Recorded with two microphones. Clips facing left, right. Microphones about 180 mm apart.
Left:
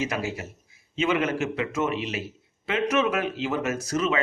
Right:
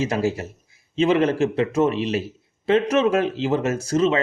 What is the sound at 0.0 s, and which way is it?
Speech, 35° right (ahead or behind).